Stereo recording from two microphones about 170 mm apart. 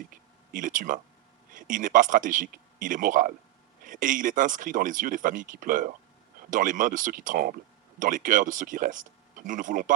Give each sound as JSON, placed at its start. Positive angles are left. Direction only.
{"t": 0.5, "sound": "speech", "side_deg": -50}